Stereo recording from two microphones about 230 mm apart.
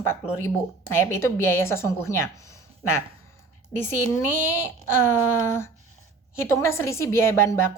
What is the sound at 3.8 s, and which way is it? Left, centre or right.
A woman's voice, centre.